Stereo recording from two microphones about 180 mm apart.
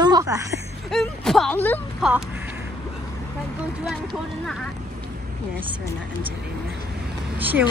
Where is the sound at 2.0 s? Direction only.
5° right (ahead or behind).